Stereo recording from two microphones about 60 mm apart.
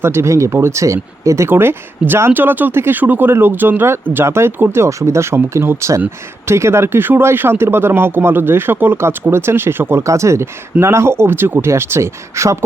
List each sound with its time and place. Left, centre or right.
0.0 s speech: right
1.5 s speech: right
2.3 s speech: right
10.1 s speech: right